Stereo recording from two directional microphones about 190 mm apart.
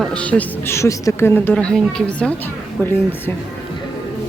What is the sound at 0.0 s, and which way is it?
A woman's voice, 5° left (ahead or behind).